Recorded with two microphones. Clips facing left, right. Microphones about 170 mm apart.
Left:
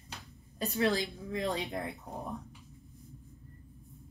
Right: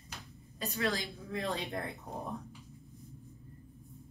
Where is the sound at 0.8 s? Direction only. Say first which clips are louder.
Left 5 dB; 20° left (ahead or behind).